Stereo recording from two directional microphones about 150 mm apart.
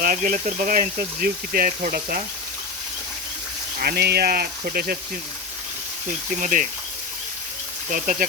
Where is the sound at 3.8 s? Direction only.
90° right.